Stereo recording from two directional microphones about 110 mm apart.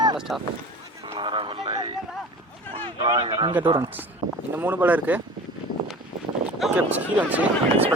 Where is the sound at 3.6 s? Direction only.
40° right (ahead or behind).